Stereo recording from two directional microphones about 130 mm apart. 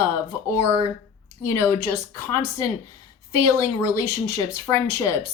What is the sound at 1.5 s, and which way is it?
Speech, 20° left (ahead or behind).